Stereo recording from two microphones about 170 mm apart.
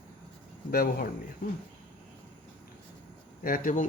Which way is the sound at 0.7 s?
60° left (ahead or behind).